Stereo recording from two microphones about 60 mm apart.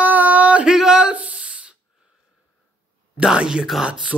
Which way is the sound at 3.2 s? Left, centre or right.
Centre.